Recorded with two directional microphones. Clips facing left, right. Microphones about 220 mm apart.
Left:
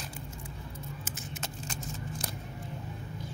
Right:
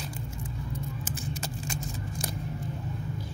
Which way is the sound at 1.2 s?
10° right (ahead or behind).